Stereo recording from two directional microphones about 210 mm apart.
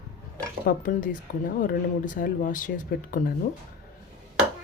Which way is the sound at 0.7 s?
40° left (ahead or behind).